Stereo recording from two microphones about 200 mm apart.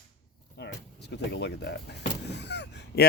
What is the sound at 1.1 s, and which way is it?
Speech, 55° left (ahead or behind).